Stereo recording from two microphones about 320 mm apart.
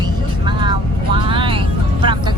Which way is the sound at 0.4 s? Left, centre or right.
Centre.